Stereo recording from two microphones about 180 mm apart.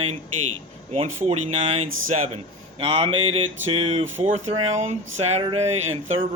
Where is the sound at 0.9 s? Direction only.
35° right (ahead or behind).